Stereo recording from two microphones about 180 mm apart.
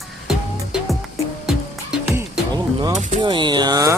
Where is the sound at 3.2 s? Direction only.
25° right (ahead or behind).